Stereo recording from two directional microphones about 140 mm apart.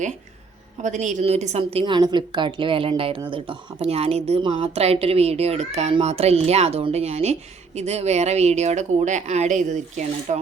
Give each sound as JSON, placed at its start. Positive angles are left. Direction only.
{"t": 0.8, "sound": "speech", "side_deg": -60}